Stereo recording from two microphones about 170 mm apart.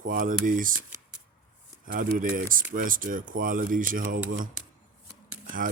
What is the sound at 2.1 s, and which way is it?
Speech, 55° right (ahead or behind).